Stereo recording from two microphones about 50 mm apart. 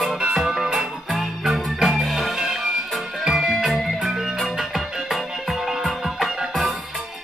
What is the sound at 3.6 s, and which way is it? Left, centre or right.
Music, centre.